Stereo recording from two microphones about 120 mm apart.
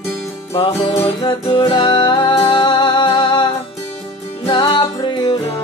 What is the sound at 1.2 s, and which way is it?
Music, 45° left (ahead or behind).